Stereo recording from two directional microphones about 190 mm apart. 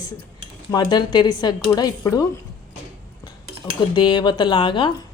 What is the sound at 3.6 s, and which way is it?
Speech, 20° left (ahead or behind).